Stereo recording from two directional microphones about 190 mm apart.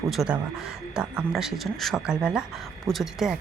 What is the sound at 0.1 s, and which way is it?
Speech, centre (ahead or behind).